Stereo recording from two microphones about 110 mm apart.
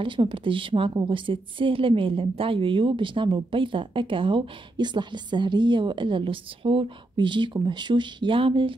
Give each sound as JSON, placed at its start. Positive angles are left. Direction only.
{"t": 0.0, "sound": "a woman's voice", "side_deg": -50}